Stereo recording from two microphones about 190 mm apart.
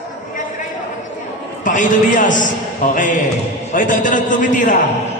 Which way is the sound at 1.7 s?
45° left (ahead or behind).